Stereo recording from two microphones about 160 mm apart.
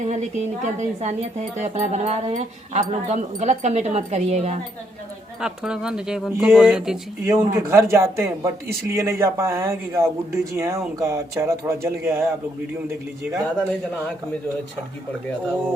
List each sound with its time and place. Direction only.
0.0 s speech: 45° right (ahead or behind)
5.4 s speech: 5° right (ahead or behind)
7.3 s speech: 15° right (ahead or behind)